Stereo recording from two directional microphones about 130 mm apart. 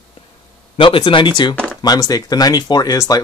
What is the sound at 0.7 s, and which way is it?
Speech, 40° left (ahead or behind).